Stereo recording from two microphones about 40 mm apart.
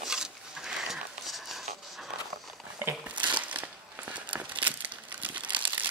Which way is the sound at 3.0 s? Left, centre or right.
Right.